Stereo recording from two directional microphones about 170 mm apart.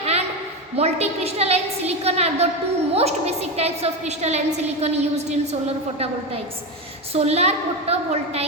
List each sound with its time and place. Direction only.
0.0 s a sound: 40° right (ahead or behind)
0.8 s a woman's voice: 40° right (ahead or behind)
7.1 s a woman's voice: 40° right (ahead or behind)